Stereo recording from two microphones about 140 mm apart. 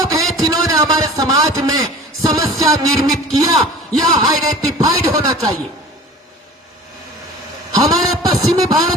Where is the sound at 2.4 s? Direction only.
Centre (ahead or behind).